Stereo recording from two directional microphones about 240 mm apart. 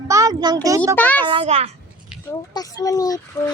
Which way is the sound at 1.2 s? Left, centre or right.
Right.